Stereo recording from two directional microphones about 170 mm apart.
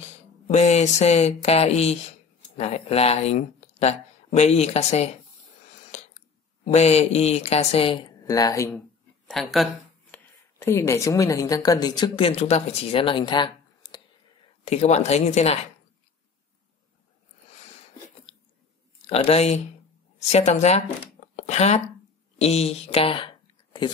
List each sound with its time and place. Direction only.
0.0 s a sound: 40° left (ahead or behind)
2.5 s speech: 40° left (ahead or behind)
6.6 s a woman's voice: 40° left (ahead or behind)
8.3 s speech: 20° left (ahead or behind)
9.3 s speech: centre (ahead or behind)
10.1 s a woman's voice: 15° left (ahead or behind)
14.6 s a woman's voice: 40° left (ahead or behind)
19.0 s a woman's voice: 35° left (ahead or behind)